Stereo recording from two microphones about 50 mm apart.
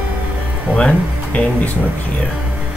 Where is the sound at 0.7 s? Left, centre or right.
Centre.